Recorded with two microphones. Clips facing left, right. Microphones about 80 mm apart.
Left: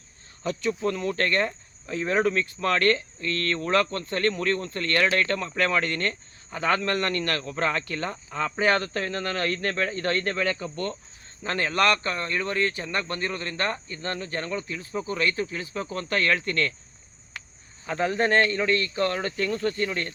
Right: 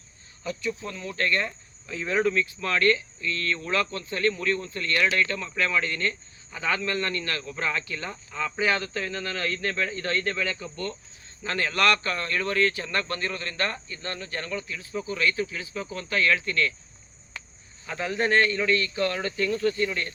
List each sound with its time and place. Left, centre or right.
0.7 s speech: left
17.8 s speech: left